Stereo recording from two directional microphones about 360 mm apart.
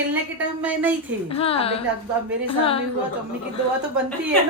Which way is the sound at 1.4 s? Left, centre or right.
Centre.